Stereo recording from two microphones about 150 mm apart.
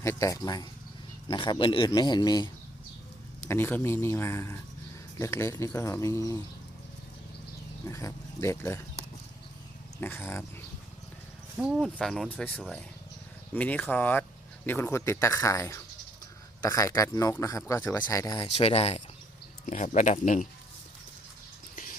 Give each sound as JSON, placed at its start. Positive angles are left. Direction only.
{"t": 0.0, "sound": "a man's voice", "side_deg": 20}
{"t": 3.4, "sound": "a man's voice", "side_deg": 15}
{"t": 7.9, "sound": "speech", "side_deg": 20}
{"t": 10.0, "sound": "a man's voice", "side_deg": 15}
{"t": 11.5, "sound": "a man's voice", "side_deg": 0}
{"t": 18.5, "sound": "a man's voice", "side_deg": 40}
{"t": 19.6, "sound": "speech", "side_deg": 60}